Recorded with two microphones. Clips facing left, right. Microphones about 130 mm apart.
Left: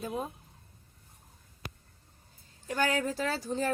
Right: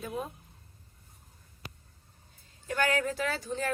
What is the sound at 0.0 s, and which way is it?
Speech, 35° left (ahead or behind).